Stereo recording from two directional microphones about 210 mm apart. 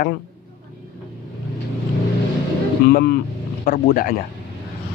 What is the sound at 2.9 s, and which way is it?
Speech, 45° left (ahead or behind).